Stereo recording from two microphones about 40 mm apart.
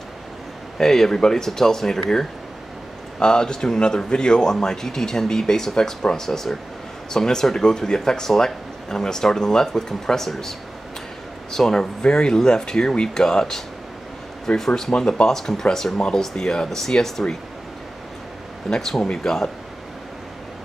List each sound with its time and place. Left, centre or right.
0.7 s speech: centre
11.5 s speech: centre
18.7 s speech: centre